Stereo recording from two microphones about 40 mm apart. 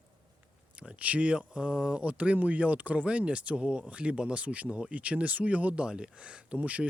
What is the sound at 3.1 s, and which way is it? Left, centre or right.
Speech, right.